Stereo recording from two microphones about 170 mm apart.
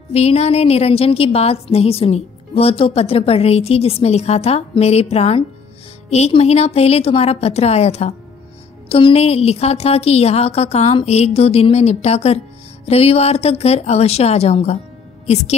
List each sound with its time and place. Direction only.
0.1 s a woman's voice: 40° left (ahead or behind)